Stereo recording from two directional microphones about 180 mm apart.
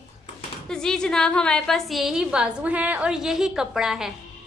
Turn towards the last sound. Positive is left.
turn(degrees=0)  # may be behind; listen again after turning